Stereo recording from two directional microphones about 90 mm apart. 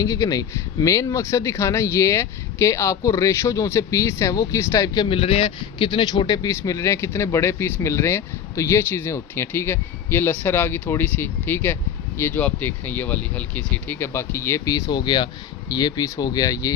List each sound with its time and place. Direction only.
0.0 s speech: 40° left (ahead or behind)
5.0 s speech: 90° left; by 14.7 s 30° left (ahead or behind)
14.7 s speech: 45° left (ahead or behind)
15.7 s speech: 45° left (ahead or behind)